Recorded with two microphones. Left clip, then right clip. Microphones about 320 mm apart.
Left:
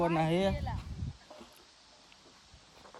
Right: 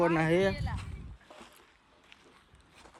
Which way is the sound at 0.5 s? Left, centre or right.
Left.